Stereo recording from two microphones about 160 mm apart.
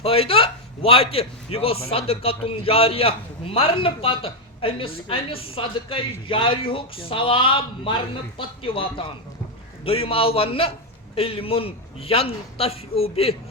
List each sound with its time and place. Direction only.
0.0 s a man's voice: 35° left (ahead or behind)